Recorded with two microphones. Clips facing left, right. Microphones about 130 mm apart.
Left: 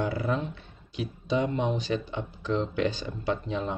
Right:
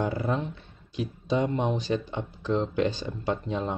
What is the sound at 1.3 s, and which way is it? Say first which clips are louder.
Speech: right 1 dB; 45° right (ahead or behind).